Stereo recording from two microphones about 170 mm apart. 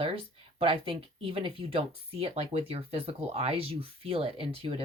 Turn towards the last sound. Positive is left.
turn(degrees=-35)  # may be behind; listen again after turning